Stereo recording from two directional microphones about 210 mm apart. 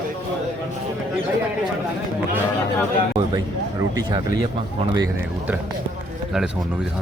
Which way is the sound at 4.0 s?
20° right (ahead or behind).